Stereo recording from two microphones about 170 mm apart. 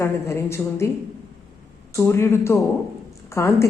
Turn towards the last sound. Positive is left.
turn(degrees=15)  # may be behind; listen again after turning